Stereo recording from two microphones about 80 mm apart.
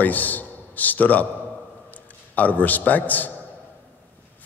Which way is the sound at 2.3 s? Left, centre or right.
Left.